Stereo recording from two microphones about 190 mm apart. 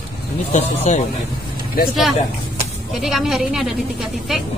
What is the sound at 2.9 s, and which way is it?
A woman's voice, centre (ahead or behind).